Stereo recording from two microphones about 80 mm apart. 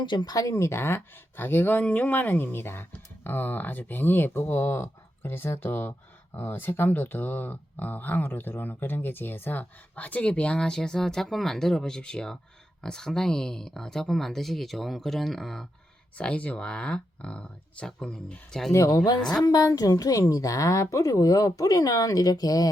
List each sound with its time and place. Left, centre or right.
0.0 s speech: left; by 15.6 s centre
16.1 s speech: centre
18.7 s speech: left
19.2 s speech: centre
19.5 s speech: left